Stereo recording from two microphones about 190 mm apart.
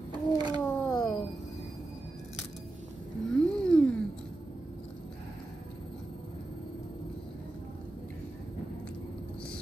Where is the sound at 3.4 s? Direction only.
5° left (ahead or behind).